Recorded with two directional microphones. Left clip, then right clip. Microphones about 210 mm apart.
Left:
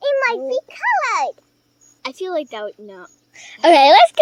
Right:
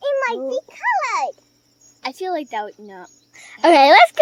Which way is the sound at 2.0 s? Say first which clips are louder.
Left 1 dB; 15° right (ahead or behind).